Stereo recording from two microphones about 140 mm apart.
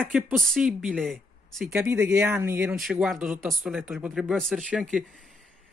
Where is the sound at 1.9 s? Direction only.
20° right (ahead or behind).